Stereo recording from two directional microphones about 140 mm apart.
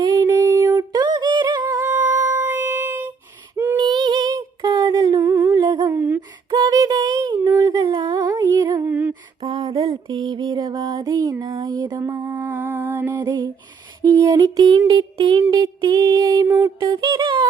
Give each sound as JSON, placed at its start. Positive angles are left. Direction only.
{"t": 0.0, "sound": "music", "side_deg": -25}
{"t": 1.7, "sound": "music", "side_deg": -20}
{"t": 3.5, "sound": "female singing", "side_deg": -15}
{"t": 3.8, "sound": "a sound", "side_deg": -30}
{"t": 5.6, "sound": "humming", "side_deg": -25}
{"t": 6.5, "sound": "music", "side_deg": -30}
{"t": 7.6, "sound": "humming", "side_deg": -30}
{"t": 8.9, "sound": "humming", "side_deg": -15}
{"t": 9.4, "sound": "music", "side_deg": -25}
{"t": 13.1, "sound": "lullaby", "side_deg": -30}
{"t": 14.0, "sound": "music", "side_deg": -25}